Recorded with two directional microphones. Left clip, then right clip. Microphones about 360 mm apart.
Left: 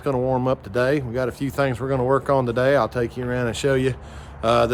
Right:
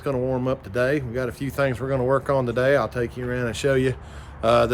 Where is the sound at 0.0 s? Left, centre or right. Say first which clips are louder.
Left 3 dB; centre.